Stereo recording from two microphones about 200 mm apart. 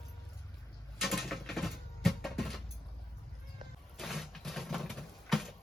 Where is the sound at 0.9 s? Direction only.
Centre (ahead or behind).